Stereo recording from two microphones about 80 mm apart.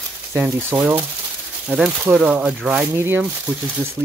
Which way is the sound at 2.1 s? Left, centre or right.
Centre.